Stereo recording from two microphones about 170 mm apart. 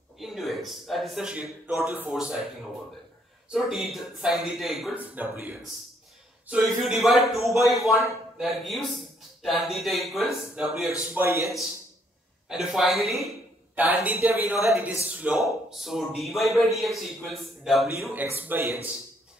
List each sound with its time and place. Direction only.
0.2 s a man's voice: centre (ahead or behind)
3.4 s a man's voice: centre (ahead or behind)
11.1 s a woman's voice: 15° right (ahead or behind)
12.4 s a man's voice: centre (ahead or behind)
18.1 s a woman's voice: 10° right (ahead or behind)